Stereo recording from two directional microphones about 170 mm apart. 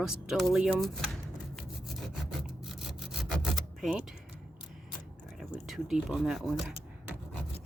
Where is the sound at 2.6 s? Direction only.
5° right (ahead or behind).